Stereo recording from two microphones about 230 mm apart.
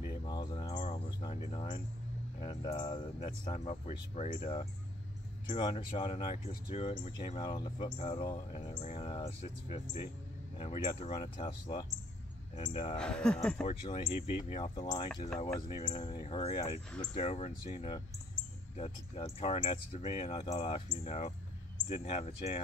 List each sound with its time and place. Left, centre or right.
0.0 s a sound: left
2.4 s speech: left
12.9 s speech: centre
13.7 s speech: left